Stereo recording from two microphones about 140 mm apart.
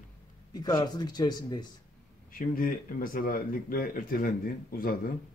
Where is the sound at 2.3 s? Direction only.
80° left.